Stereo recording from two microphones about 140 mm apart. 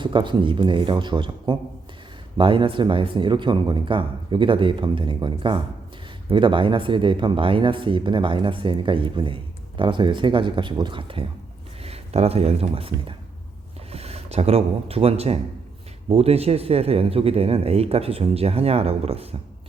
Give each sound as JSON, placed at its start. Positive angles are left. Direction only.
{"t": 0.0, "sound": "a man's voice", "side_deg": -35}